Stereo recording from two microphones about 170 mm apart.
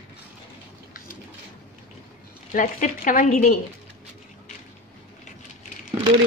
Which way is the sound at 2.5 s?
50° left (ahead or behind).